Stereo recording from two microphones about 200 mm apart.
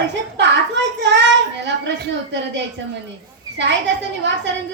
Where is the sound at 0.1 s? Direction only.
60° right (ahead or behind).